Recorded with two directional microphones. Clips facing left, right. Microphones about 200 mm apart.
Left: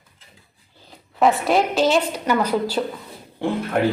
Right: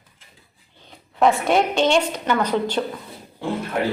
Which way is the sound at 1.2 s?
Centre (ahead or behind).